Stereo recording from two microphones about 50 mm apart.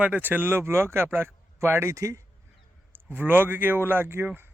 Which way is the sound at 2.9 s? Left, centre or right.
Right.